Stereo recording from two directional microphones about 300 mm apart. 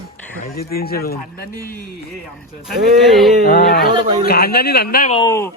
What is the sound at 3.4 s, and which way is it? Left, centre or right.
Speech, left.